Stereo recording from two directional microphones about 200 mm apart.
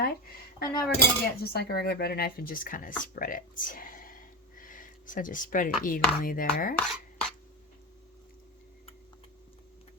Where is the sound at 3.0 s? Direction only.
40° left (ahead or behind).